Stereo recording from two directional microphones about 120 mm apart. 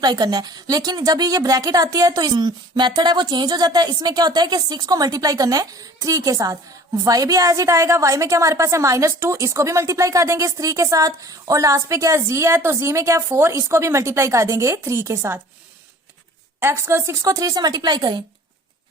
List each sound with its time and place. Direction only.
0.0 s a woman's voice: 35° right (ahead or behind)
16.6 s a woman's voice: 20° right (ahead or behind); by 18.2 s 35° right (ahead or behind)